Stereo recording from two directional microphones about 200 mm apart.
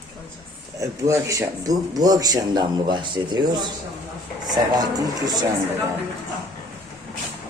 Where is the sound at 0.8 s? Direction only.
15° right (ahead or behind).